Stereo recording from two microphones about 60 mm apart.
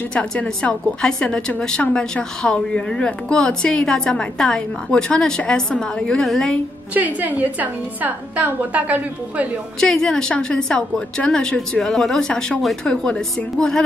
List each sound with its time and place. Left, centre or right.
0.1 s a woman's voice: centre
6.9 s a woman's voice: right
9.8 s a woman's voice: centre